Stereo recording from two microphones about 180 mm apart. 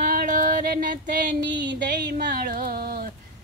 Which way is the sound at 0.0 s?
50° right (ahead or behind).